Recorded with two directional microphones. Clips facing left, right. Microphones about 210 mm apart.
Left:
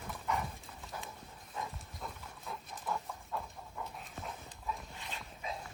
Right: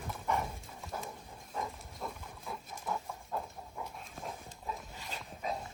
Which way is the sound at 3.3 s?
40° right (ahead or behind).